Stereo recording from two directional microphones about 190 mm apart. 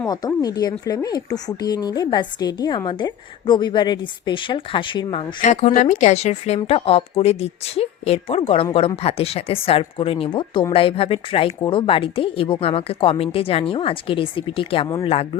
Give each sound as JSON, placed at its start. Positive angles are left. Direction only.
{"t": 0.0, "sound": "speech", "side_deg": 20}
{"t": 5.4, "sound": "a woman's voice", "side_deg": 40}